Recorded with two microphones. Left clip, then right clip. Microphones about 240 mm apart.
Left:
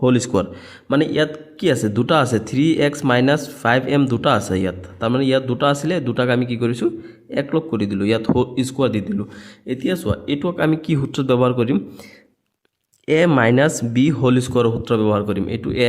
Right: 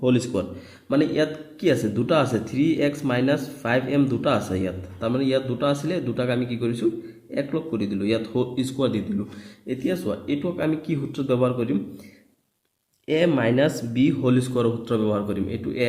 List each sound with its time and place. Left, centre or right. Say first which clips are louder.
0.0 s a man's voice: left 5 dB; left
13.1 s a man's voice: left 6 dB; left